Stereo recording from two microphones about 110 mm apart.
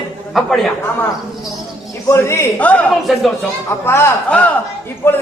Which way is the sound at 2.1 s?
25° left (ahead or behind).